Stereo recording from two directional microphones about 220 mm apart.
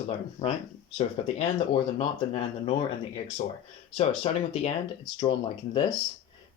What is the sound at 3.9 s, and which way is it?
Speech, 25° left (ahead or behind).